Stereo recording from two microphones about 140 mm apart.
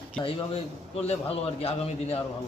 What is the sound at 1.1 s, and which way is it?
A man's voice, 45° left (ahead or behind).